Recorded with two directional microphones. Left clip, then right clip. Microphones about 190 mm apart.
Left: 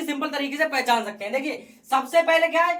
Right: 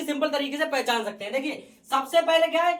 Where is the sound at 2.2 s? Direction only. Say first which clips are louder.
Left 1 dB; 20° left (ahead or behind).